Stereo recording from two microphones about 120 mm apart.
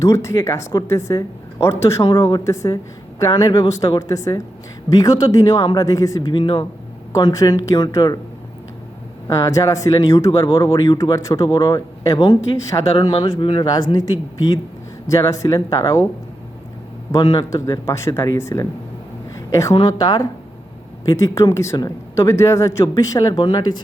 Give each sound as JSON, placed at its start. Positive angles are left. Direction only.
{"t": 0.0, "sound": "speech", "side_deg": 25}
{"t": 7.1, "sound": "speech", "side_deg": 30}
{"t": 9.2, "sound": "speech", "side_deg": 25}
{"t": 13.0, "sound": "speech", "side_deg": 40}
{"t": 17.1, "sound": "a woman's voice", "side_deg": 35}
{"t": 19.7, "sound": "speech", "side_deg": 35}